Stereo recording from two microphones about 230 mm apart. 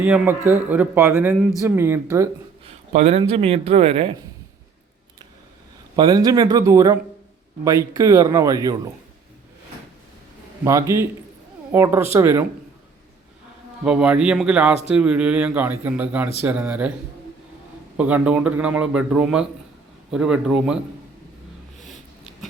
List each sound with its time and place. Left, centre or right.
0.0 s a man's voice: centre
2.6 s speech: right
6.0 s a man's voice: centre
10.6 s a man's voice: centre
13.8 s a man's voice: centre
17.9 s a man's voice: centre